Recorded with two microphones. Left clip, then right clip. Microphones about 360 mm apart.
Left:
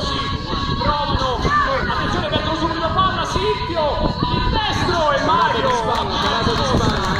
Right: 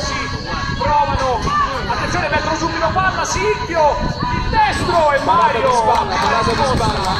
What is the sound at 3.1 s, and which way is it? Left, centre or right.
Music, right.